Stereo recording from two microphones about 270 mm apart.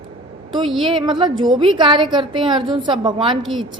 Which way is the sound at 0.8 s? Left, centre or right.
Centre.